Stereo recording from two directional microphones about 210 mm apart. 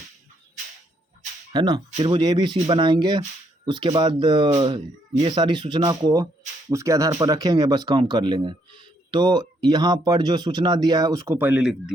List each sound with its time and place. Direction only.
1.5 s speech: 20° right (ahead or behind)